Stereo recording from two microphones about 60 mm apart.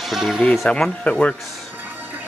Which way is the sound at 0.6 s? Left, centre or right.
Centre.